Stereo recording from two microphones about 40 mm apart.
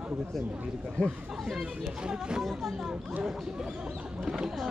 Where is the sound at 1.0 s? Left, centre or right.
Left.